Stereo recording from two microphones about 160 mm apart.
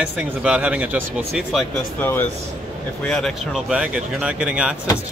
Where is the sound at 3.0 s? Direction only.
5° left (ahead or behind).